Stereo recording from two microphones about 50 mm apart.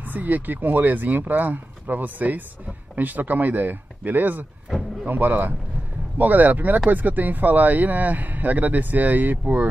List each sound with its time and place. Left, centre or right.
0.0 s speech: right